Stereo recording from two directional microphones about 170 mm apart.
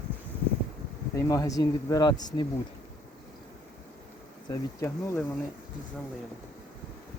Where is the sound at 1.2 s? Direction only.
20° left (ahead or behind).